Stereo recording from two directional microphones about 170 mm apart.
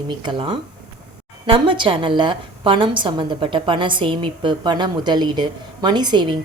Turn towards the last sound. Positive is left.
turn(degrees=-25)  # may be behind; listen again after turning